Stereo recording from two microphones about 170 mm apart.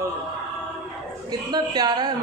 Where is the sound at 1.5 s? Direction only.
25° right (ahead or behind).